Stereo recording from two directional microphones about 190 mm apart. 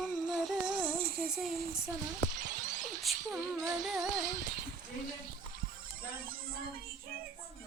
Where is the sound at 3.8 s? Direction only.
Centre (ahead or behind).